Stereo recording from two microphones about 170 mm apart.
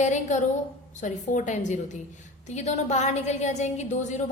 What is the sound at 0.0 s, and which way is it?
A woman's voice, 45° left (ahead or behind).